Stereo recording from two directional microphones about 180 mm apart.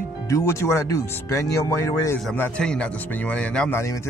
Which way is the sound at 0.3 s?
15° left (ahead or behind).